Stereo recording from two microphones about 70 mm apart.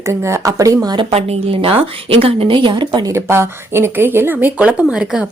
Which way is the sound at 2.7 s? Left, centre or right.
Right.